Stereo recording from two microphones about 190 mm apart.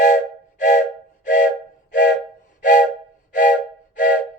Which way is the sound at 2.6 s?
45° left (ahead or behind).